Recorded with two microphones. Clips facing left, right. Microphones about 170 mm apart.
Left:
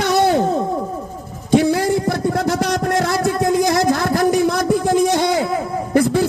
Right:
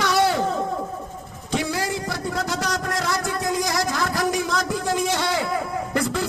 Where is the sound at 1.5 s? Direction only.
55° left (ahead or behind).